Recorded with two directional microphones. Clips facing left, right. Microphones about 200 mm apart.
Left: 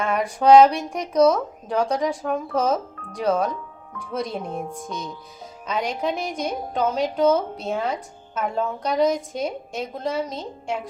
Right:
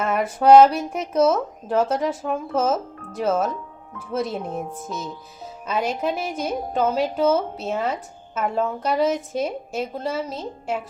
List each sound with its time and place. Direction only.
0.0 s speech: 5° right (ahead or behind)